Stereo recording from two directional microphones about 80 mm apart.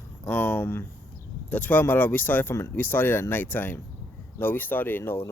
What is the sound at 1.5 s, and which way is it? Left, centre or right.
Speech, centre.